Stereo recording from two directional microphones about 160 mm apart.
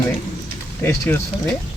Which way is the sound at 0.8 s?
15° left (ahead or behind).